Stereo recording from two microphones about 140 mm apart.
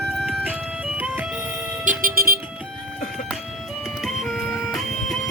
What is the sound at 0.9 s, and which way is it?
Music, 15° right (ahead or behind).